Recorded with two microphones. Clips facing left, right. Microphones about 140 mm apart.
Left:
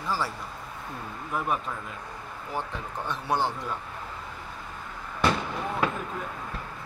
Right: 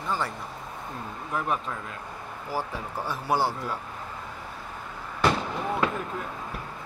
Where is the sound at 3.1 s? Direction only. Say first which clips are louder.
Right 1 dB; 10° right (ahead or behind).